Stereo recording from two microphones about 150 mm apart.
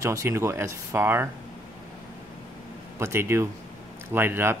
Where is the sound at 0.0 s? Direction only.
20° right (ahead or behind).